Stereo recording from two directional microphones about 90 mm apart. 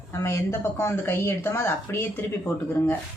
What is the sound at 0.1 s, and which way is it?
Speech, 30° left (ahead or behind).